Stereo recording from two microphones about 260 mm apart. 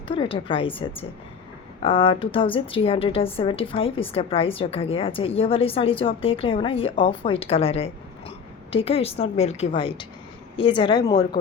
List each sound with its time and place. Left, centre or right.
0.1 s a woman's voice: centre